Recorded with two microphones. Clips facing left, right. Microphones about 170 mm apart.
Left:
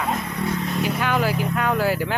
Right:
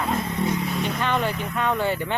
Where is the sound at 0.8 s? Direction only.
5° left (ahead or behind).